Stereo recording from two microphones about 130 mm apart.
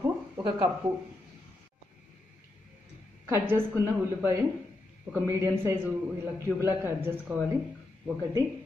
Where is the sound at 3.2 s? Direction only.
20° right (ahead or behind).